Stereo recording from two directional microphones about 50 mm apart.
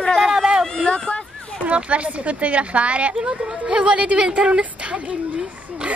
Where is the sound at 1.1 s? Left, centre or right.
Left.